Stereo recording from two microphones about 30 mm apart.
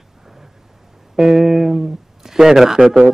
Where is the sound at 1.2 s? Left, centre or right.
Centre.